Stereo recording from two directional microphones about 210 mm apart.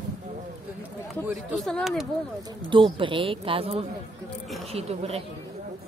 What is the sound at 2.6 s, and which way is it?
Speech, 25° right (ahead or behind).